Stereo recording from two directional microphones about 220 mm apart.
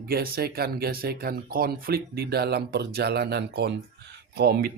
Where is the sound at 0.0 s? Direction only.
45° right (ahead or behind).